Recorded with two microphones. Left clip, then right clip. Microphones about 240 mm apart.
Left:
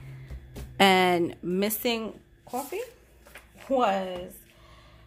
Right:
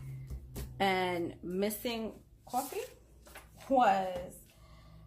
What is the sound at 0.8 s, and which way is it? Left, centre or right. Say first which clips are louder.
Speech: left 11 dB; left.